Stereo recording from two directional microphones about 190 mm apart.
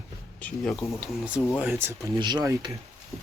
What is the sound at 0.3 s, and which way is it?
Speech, 5° left (ahead or behind).